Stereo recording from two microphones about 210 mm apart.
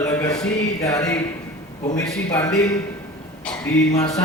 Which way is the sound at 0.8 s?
15° left (ahead or behind).